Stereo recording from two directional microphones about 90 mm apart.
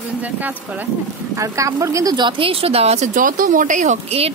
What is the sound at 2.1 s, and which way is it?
Speech, 60° right (ahead or behind).